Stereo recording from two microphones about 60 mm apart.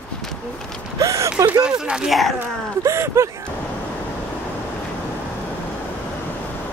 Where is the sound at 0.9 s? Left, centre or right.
Right.